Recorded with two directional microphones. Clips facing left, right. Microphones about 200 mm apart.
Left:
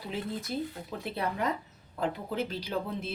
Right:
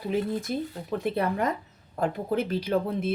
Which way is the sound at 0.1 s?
55° right (ahead or behind).